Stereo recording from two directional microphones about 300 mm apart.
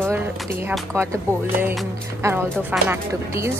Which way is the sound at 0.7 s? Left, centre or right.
Centre.